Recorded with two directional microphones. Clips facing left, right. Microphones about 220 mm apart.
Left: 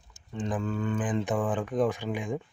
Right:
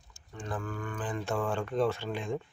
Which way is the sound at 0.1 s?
20° left (ahead or behind).